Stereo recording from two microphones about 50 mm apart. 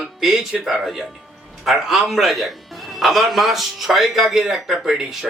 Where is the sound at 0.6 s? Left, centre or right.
Centre.